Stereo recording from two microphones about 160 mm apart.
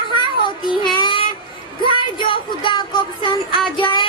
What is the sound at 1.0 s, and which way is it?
Child singing, 30° left (ahead or behind).